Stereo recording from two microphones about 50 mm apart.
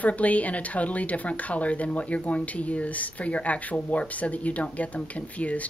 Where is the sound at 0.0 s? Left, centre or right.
Left.